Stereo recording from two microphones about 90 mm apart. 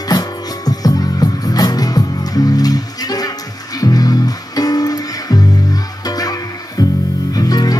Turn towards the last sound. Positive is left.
turn(degrees=45)  # may be behind; listen again after turning